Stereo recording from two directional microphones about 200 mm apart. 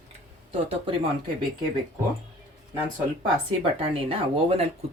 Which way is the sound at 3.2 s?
30° right (ahead or behind).